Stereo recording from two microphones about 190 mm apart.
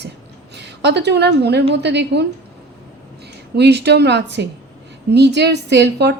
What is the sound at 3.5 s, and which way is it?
A woman's voice, 60° right (ahead or behind).